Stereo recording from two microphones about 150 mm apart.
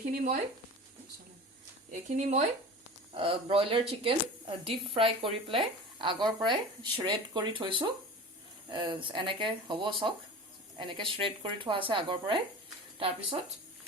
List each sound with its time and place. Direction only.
0.1 s speech: 70° right (ahead or behind)
1.9 s speech: 50° right (ahead or behind)
3.2 s speech: 35° right (ahead or behind)